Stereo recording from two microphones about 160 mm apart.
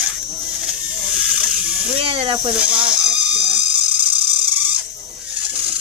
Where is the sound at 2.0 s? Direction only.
35° right (ahead or behind).